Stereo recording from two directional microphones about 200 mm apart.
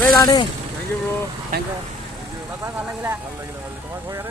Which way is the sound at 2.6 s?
10° right (ahead or behind).